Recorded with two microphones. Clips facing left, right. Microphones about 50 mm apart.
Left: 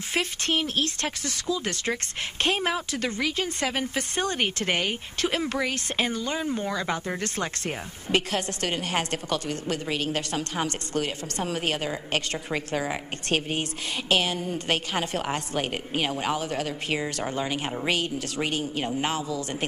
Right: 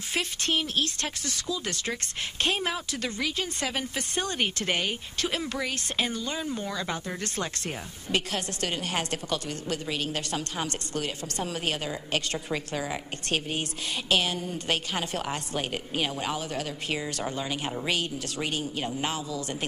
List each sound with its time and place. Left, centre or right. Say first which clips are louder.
0.1 s a woman's voice: left 2 dB; left